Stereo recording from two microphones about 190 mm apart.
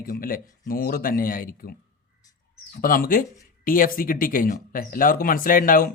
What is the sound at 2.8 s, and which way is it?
Speech, 50° left (ahead or behind).